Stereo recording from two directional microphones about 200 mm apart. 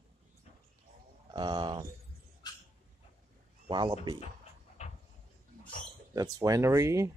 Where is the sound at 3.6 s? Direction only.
25° right (ahead or behind).